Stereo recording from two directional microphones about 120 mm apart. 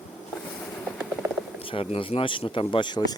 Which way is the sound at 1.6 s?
50° left (ahead or behind).